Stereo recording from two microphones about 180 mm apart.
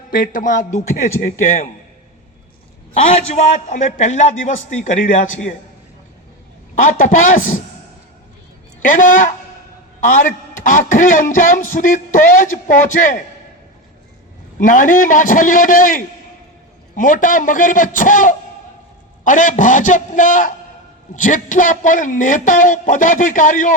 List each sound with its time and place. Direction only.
0.1 s a man's voice: 50° left (ahead or behind)
2.9 s a man's voice: 35° left (ahead or behind)
6.7 s a man's voice: 50° left (ahead or behind)
8.8 s a man's voice: 50° left (ahead or behind)
14.6 s a man's voice: 50° left (ahead or behind)